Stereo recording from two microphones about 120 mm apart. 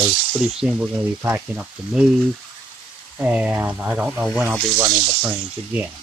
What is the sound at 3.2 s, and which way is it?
Speech, 15° right (ahead or behind).